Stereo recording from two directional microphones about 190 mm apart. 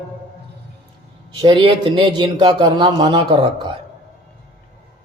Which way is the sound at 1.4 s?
25° right (ahead or behind).